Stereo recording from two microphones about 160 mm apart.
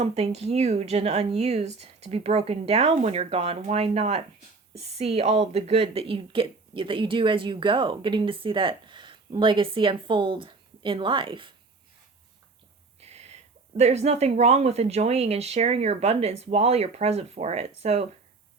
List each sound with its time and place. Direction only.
0.0 s speech: 40° right (ahead or behind)
13.0 s speech: 45° right (ahead or behind)